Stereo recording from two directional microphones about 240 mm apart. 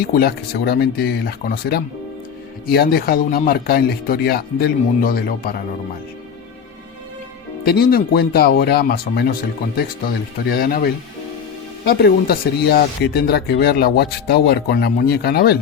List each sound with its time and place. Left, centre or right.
0.0 s speech: left
7.6 s speech: left
10.5 s speech: left